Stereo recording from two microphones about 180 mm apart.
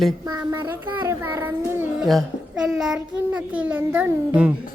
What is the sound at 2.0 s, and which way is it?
A child's voice, centre (ahead or behind).